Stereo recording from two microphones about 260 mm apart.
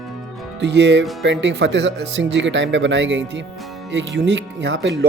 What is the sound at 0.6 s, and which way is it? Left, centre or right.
Speech, right.